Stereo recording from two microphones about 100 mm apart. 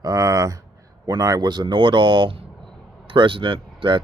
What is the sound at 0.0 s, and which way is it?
Speech, 35° right (ahead or behind).